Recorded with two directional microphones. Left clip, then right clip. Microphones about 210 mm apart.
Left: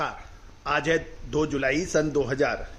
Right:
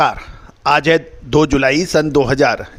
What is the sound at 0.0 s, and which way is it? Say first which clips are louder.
A man's voice: right 16 dB; 50° right (ahead or behind).